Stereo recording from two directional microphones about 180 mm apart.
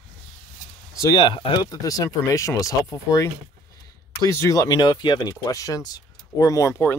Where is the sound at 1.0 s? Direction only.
25° left (ahead or behind).